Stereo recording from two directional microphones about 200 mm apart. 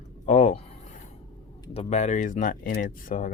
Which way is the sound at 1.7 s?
35° left (ahead or behind).